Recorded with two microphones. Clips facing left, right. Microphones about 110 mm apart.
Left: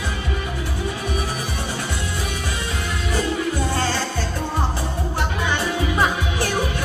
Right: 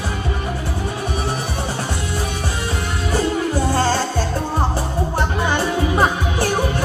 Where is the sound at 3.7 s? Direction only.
35° right (ahead or behind).